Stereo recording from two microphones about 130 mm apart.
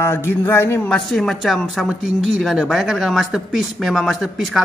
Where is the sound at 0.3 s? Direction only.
20° left (ahead or behind).